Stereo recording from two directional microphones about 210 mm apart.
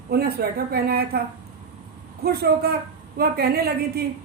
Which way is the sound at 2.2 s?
50° right (ahead or behind).